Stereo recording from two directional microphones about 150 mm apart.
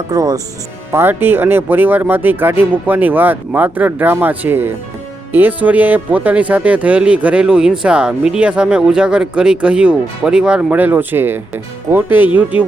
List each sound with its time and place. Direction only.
0.1 s speech: 25° right (ahead or behind)
0.9 s speech: 15° right (ahead or behind)